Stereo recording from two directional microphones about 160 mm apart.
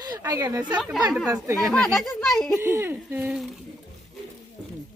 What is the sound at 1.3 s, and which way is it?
Speech, 15° right (ahead or behind).